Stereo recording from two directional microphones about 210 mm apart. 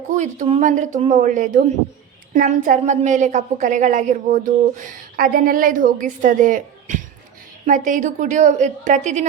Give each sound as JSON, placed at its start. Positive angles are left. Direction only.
{"t": 0.1, "sound": "a woman's voice", "side_deg": -35}